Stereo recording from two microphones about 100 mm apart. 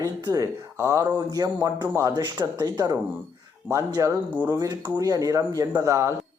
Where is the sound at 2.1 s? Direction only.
45° right (ahead or behind).